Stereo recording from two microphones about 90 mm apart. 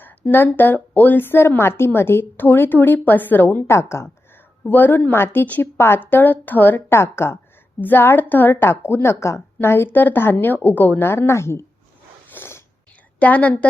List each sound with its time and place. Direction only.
0.0 s a woman's voice: 20° left (ahead or behind)
12.3 s a sound: 30° left (ahead or behind)
13.1 s a woman's voice: 15° left (ahead or behind)